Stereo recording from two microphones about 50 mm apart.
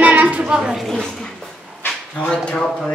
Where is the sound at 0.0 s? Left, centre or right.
Right.